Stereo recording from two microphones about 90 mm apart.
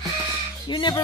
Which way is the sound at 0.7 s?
60° left (ahead or behind).